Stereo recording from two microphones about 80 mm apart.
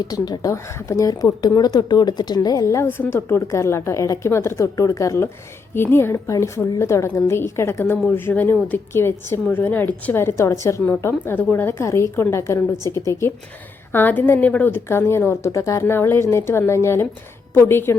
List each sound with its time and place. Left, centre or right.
0.0 s speech: left
0.5 s speech: left
2.8 s a woman's voice: left
10.8 s a woman's voice: left
11.9 s a woman's voice: left
13.9 s a woman's voice: left